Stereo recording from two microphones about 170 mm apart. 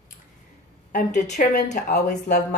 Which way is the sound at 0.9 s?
45° left (ahead or behind).